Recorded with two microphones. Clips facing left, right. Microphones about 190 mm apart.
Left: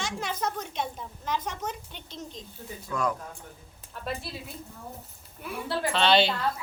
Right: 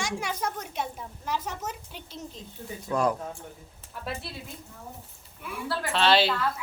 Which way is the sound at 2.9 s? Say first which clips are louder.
Right 4 dB; 35° right (ahead or behind).